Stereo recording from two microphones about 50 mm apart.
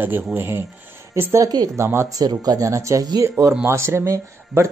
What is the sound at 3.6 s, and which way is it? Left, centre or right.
Speech, right.